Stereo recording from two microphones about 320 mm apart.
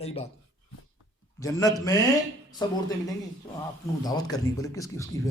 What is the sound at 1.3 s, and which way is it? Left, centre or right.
Speech, centre.